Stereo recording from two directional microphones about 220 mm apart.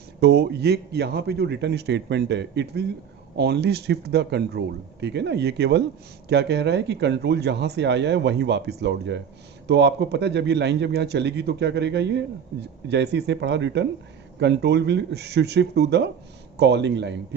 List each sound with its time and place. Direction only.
0.2 s speech: 50° right (ahead or behind)